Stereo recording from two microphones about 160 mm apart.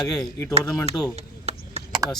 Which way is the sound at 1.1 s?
40° right (ahead or behind).